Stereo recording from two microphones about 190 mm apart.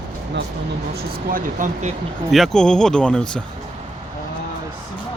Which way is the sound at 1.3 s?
45° right (ahead or behind).